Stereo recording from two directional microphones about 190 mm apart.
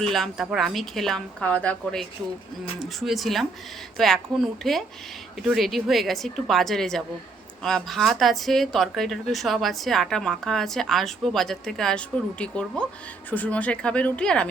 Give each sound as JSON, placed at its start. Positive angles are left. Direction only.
{"t": 0.0, "sound": "speech", "side_deg": 0}